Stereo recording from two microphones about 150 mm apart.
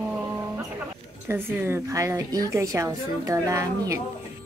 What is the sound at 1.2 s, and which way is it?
A woman's voice, 15° right (ahead or behind).